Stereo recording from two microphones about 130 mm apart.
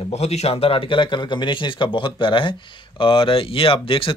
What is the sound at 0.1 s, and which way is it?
A man's voice, 55° left (ahead or behind).